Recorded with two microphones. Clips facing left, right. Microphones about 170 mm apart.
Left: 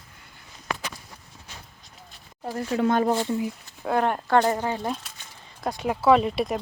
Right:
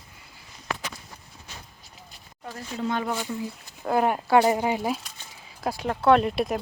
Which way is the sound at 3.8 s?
5° right (ahead or behind).